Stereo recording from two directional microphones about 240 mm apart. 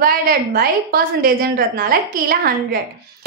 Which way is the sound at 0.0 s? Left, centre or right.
Right.